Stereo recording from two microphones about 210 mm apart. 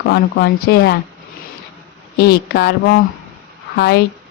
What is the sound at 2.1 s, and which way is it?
Speech, 50° left (ahead or behind).